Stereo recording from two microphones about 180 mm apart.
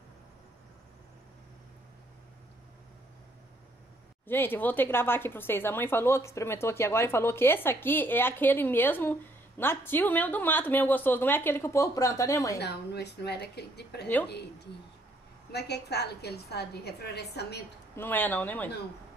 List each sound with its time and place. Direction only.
4.3 s speech: 10° left (ahead or behind)
12.5 s a woman's voice: 65° left (ahead or behind)
15.5 s a woman's voice: 65° left (ahead or behind)
17.9 s speech: 10° left (ahead or behind)